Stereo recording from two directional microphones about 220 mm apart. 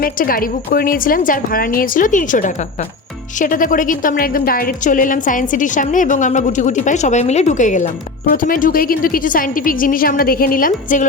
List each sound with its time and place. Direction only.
0.0 s a woman's voice: 40° left (ahead or behind)